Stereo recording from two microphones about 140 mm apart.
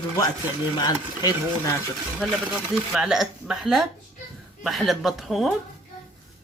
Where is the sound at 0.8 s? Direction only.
25° left (ahead or behind).